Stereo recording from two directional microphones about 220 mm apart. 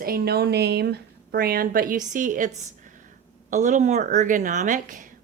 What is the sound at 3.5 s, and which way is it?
A woman's voice, 35° right (ahead or behind).